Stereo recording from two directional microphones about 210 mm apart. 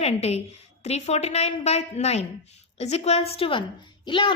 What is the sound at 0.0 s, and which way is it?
A woman's voice, 30° left (ahead or behind).